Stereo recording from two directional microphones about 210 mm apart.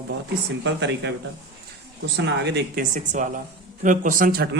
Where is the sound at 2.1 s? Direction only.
55° right (ahead or behind).